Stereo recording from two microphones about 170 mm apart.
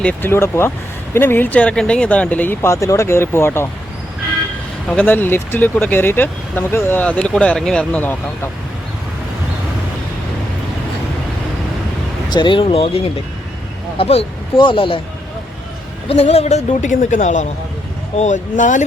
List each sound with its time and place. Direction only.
0.0 s speech: 10° left (ahead or behind)
4.9 s speech: 10° left (ahead or behind)
12.3 s speech: 30° left (ahead or behind)
16.0 s a woman's voice: 35° left (ahead or behind)